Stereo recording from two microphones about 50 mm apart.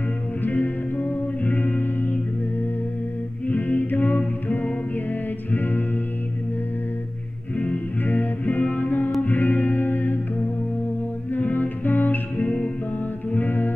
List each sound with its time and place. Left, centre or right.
0.4 s music: left
3.4 s music: left
7.5 s music: left
11.3 s music: left